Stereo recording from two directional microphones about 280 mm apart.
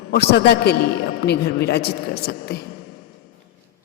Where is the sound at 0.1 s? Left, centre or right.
Left.